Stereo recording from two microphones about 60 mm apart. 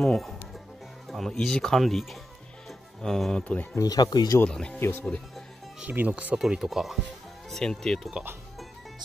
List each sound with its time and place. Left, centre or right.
0.0 s speech: centre
3.7 s speech: left
4.5 s speech: centre
4.7 s speech: left
5.9 s speech: right
6.5 s speech: centre
7.5 s speech: centre